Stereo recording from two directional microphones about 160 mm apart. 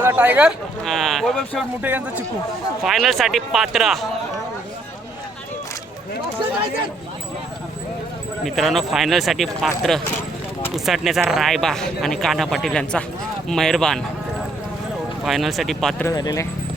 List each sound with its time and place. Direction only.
0.0 s speech: 15° right (ahead or behind)
1.8 s speech: 10° right (ahead or behind)
8.4 s speech: centre (ahead or behind)
15.2 s speech: centre (ahead or behind)
16.0 s speech: 20° left (ahead or behind)